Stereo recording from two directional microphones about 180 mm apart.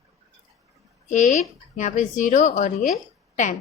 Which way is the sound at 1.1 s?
40° left (ahead or behind).